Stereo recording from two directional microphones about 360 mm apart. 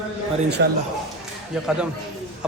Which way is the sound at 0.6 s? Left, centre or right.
Right.